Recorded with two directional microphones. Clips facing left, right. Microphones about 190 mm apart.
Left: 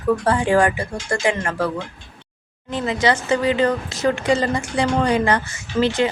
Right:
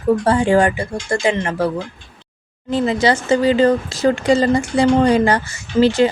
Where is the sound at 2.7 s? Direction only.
30° right (ahead or behind).